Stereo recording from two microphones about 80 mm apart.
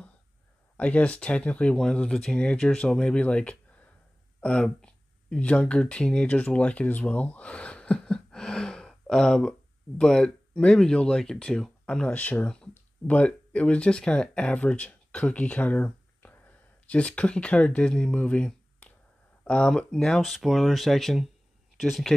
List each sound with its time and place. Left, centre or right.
0.7 s speech: centre
12.4 s a sound: centre
13.1 s speech: centre